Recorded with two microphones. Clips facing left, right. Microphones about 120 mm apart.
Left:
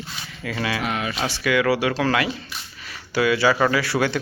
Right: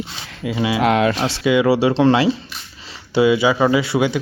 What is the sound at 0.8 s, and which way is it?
Speech, 90° right.